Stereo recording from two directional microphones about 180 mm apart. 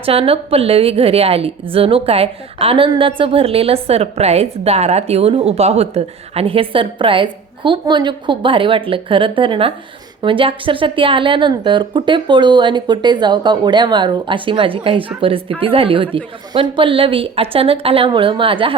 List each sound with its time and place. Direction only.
0.0 s a woman's voice: 30° right (ahead or behind)